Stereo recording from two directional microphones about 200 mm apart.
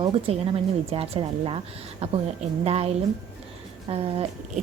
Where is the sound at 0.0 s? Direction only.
30° right (ahead or behind).